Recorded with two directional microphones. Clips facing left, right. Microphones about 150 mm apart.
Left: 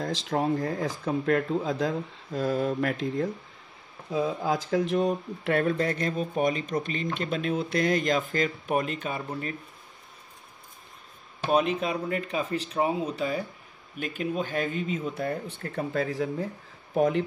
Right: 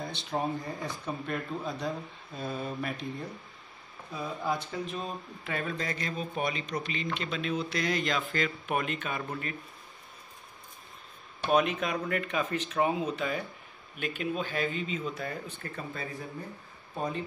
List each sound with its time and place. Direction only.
0.0 s speech: 90° left; by 9.2 s 35° left (ahead or behind)
11.4 s speech: 30° left (ahead or behind); by 17.2 s 80° left